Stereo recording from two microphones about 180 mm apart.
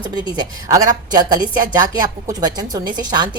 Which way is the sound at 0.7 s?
20° right (ahead or behind).